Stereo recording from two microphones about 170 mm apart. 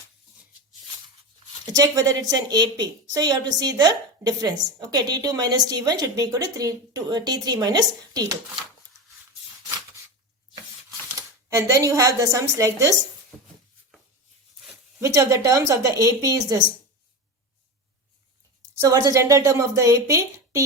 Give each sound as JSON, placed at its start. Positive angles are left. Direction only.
{"t": 1.6, "sound": "a woman's voice", "side_deg": -20}
{"t": 11.1, "sound": "a woman's voice", "side_deg": -20}
{"t": 15.0, "sound": "a woman's voice", "side_deg": -20}
{"t": 18.8, "sound": "a woman's voice", "side_deg": -20}